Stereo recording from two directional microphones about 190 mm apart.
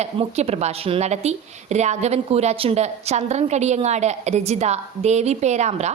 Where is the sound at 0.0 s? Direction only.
35° right (ahead or behind).